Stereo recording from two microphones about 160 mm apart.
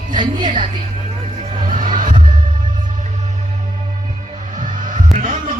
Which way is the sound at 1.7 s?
55° right (ahead or behind).